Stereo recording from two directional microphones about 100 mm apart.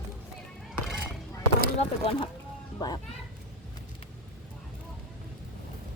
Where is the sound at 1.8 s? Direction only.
70° left (ahead or behind).